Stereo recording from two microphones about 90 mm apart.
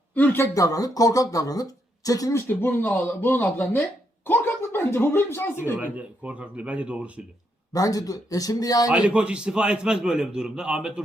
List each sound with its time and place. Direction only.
0.1 s a sound: 20° left (ahead or behind)
0.5 s speech: 40° left (ahead or behind)
2.3 s speech: 25° left (ahead or behind)
4.3 s a sound: 25° left (ahead or behind)
5.7 s a man's voice: 15° right (ahead or behind)
7.7 s speech: 40° left (ahead or behind)
8.9 s a man's voice: 10° right (ahead or behind)